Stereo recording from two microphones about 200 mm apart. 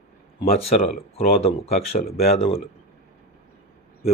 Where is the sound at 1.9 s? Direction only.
50° left (ahead or behind).